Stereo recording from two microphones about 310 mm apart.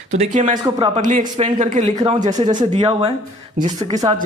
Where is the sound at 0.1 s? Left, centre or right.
Right.